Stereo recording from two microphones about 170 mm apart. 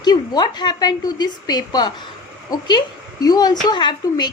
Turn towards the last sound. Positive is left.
turn(degrees=25)  # may be behind; listen again after turning